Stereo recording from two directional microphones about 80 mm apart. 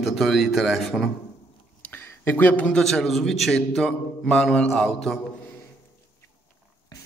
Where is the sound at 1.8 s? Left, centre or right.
Left.